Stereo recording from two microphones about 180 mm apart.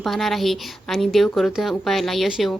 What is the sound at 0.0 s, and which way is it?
A woman's voice, centre (ahead or behind).